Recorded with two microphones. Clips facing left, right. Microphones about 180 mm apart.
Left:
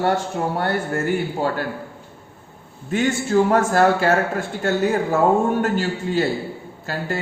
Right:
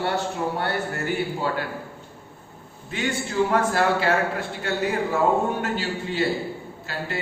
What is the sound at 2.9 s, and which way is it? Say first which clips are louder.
A man's voice: left 7 dB; 45° left (ahead or behind).